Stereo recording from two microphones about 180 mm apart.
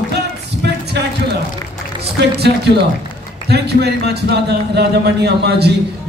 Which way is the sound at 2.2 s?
65° right (ahead or behind).